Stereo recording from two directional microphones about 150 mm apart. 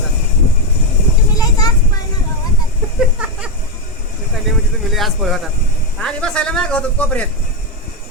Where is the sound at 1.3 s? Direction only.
25° left (ahead or behind).